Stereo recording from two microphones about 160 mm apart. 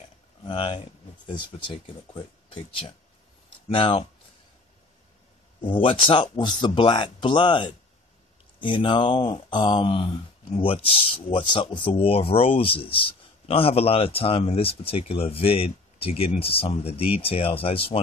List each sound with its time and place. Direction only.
0.5 s speech: 30° left (ahead or behind)
3.6 s speech: 35° left (ahead or behind)
5.6 s speech: 30° left (ahead or behind)